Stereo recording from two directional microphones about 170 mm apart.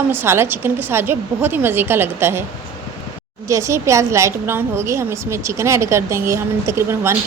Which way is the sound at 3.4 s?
20° right (ahead or behind).